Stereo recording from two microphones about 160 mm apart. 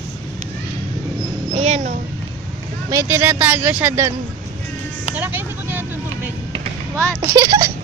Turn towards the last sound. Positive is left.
turn(degrees=-25)  # may be behind; listen again after turning